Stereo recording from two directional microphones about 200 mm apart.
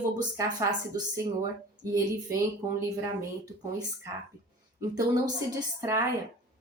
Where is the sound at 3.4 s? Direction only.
20° right (ahead or behind).